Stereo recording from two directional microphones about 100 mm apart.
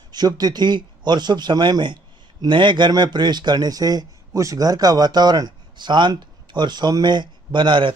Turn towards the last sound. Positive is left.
turn(degrees=-50)  # may be behind; listen again after turning